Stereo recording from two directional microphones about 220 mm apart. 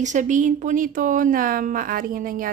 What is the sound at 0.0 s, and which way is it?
Speech, 35° right (ahead or behind).